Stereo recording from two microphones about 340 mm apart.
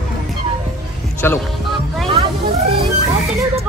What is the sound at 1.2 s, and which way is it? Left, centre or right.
Speech, centre.